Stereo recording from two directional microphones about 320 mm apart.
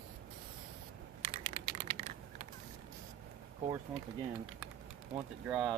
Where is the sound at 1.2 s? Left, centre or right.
Centre.